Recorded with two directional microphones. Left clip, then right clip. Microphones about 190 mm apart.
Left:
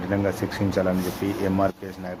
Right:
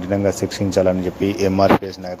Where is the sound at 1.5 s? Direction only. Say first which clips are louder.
Right 10 dB; 25° right (ahead or behind).